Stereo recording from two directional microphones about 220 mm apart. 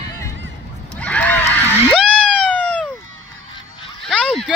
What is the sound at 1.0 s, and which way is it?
Neigh, 5° left (ahead or behind).